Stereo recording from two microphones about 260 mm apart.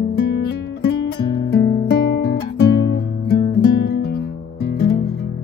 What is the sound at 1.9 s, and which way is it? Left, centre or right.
Music, left.